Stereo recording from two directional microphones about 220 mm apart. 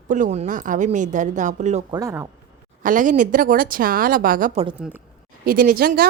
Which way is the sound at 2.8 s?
35° right (ahead or behind).